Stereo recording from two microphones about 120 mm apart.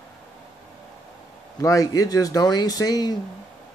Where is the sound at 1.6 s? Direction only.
30° left (ahead or behind).